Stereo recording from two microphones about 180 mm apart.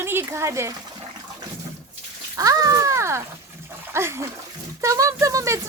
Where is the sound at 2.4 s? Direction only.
20° right (ahead or behind).